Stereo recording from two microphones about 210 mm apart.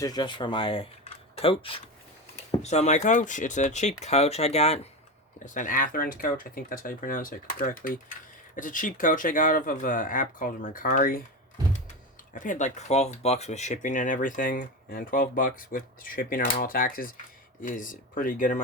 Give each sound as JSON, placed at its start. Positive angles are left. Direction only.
{"t": 0.0, "sound": "speech", "side_deg": 20}
{"t": 12.3, "sound": "speech", "side_deg": 40}